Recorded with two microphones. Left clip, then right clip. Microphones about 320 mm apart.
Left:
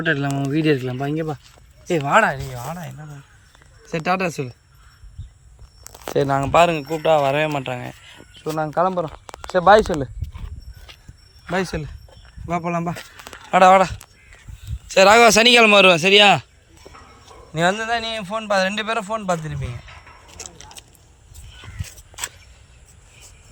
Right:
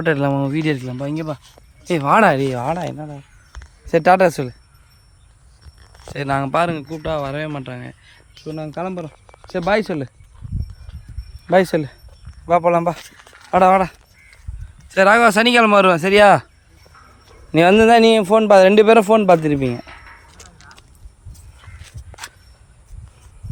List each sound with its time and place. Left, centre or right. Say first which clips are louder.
0.0 s speech: right 4 dB; centre
1.9 s speech: right 3 dB; centre
3.9 s speech: right 9 dB; centre
6.1 s speech: left 3 dB; centre
11.5 s speech: right 9 dB; centre
14.9 s speech: left 1 dB; centre
17.7 s a man's voice: right 12 dB; right
20.4 s a sound: left 4 dB; left